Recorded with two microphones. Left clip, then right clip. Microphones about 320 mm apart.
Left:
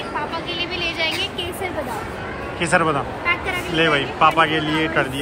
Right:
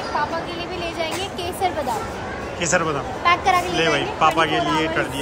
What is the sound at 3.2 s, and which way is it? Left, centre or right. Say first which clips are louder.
Speech: right 5 dB; right.